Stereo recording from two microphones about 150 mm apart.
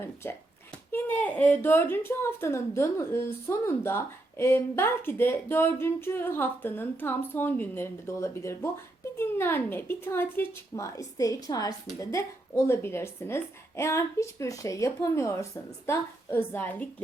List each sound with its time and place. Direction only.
0.0 s a woman's voice: 15° left (ahead or behind)